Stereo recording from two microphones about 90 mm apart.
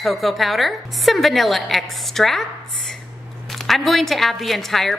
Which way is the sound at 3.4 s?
Centre (ahead or behind).